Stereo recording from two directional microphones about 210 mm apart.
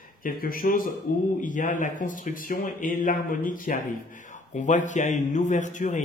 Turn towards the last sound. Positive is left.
turn(degrees=35)  # may be behind; listen again after turning